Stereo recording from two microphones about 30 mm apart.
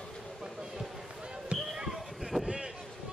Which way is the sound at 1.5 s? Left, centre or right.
Right.